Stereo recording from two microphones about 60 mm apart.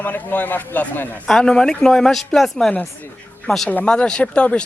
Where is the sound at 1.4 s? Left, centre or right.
Centre.